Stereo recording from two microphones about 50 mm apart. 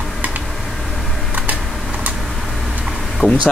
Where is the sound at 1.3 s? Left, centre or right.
Right.